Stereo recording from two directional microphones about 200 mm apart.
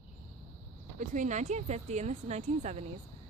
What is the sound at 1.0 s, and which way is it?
A woman's voice, 40° right (ahead or behind).